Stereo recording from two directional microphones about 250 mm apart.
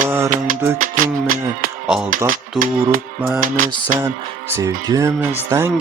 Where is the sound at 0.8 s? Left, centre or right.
Right.